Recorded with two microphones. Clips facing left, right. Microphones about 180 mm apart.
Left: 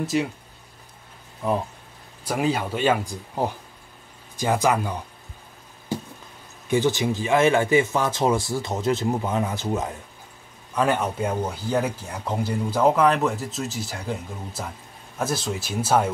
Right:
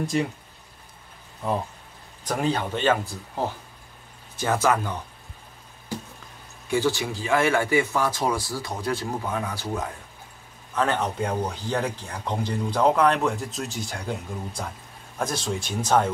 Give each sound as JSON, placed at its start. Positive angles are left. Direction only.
{"t": 0.0, "sound": "speech", "side_deg": 5}
{"t": 2.2, "sound": "speech", "side_deg": 10}
{"t": 6.7, "sound": "speech", "side_deg": 20}
{"t": 10.7, "sound": "speech", "side_deg": 10}